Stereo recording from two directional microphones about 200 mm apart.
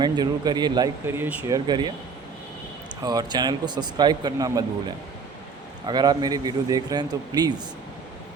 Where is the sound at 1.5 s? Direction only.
20° right (ahead or behind).